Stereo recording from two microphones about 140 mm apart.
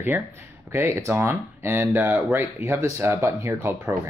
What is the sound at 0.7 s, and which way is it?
Speech, 20° right (ahead or behind).